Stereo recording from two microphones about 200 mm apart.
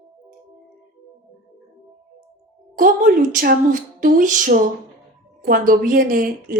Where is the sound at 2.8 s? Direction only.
45° right (ahead or behind).